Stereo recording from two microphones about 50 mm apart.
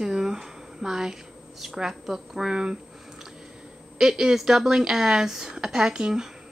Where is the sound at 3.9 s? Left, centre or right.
Centre.